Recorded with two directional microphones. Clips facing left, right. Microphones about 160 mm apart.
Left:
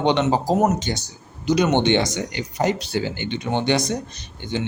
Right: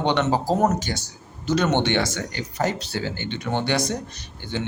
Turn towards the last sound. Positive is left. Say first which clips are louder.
# left 3 dB
turn(degrees=20)  # may be behind; listen again after turning